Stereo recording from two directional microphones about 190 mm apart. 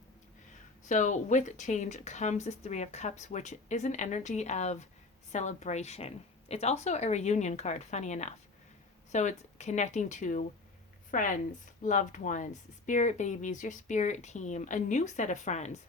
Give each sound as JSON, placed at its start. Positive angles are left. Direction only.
{"t": 0.9, "sound": "speech", "side_deg": 40}